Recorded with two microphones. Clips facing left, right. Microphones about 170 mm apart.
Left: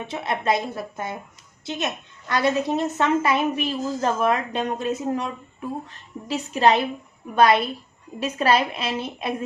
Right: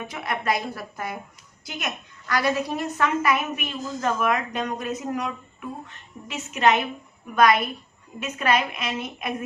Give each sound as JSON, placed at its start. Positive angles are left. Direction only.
{"t": 0.1, "sound": "a woman's voice", "side_deg": 25}